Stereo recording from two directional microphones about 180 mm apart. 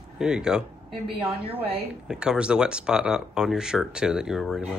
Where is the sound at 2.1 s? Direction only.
5° right (ahead or behind).